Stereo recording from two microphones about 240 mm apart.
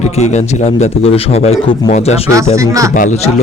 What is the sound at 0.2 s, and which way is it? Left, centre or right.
Speech, left.